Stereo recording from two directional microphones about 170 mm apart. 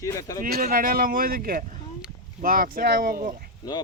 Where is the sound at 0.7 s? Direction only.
55° right (ahead or behind).